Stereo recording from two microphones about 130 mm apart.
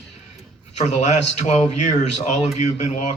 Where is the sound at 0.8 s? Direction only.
60° left (ahead or behind).